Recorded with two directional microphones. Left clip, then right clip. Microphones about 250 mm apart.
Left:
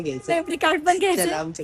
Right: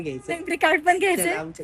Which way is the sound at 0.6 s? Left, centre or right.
Centre.